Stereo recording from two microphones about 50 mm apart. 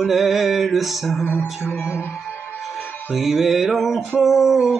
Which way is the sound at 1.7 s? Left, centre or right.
Left.